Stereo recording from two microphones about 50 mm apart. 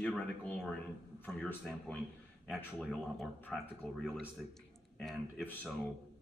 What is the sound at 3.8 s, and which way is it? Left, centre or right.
Speech, centre.